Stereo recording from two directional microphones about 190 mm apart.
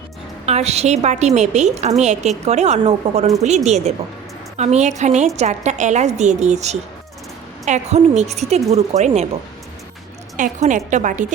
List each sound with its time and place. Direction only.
0.4 s a woman's voice: 35° right (ahead or behind)
10.3 s a woman's voice: 40° right (ahead or behind)